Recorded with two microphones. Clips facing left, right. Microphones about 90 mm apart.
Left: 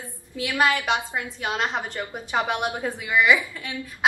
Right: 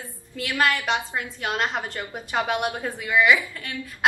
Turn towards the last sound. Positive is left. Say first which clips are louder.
# even
turn(degrees=5)  # may be behind; listen again after turning